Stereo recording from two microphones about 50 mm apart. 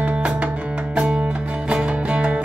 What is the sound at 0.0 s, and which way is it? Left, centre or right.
Music, right.